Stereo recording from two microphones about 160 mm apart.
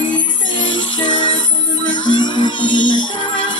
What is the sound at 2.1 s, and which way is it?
Music, 30° left (ahead or behind).